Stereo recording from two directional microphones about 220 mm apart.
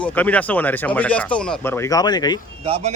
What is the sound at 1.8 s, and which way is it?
Speech, 15° left (ahead or behind).